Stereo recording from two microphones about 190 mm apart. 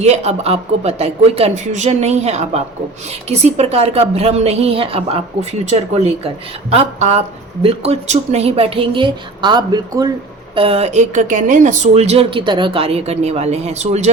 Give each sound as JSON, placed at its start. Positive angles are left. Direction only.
{"t": 0.0, "sound": "speech", "side_deg": -35}